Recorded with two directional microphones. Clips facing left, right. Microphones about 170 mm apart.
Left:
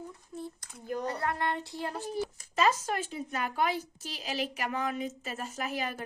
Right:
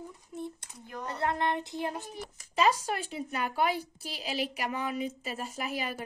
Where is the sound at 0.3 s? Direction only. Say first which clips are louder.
Right 3 dB; 20° right (ahead or behind).